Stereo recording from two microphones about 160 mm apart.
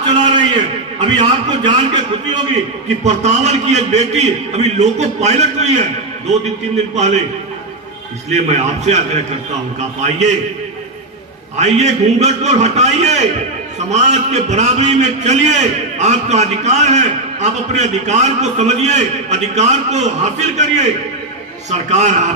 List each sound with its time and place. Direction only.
0.0 s a sound: 30° right (ahead or behind)
1.5 s a man's voice: 30° right (ahead or behind)
3.0 s a man's voice: 45° right (ahead or behind)
6.9 s a man's voice: 45° right (ahead or behind)
8.3 s a man's voice: 45° right (ahead or behind)
11.5 s a man's voice: 45° right (ahead or behind)